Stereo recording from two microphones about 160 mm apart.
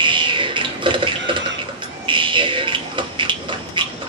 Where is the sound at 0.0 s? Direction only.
30° right (ahead or behind).